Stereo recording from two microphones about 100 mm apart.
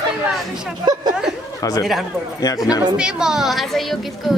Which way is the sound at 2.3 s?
40° left (ahead or behind).